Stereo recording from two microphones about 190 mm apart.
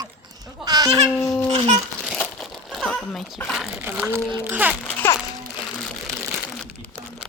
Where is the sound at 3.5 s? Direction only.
5° right (ahead or behind).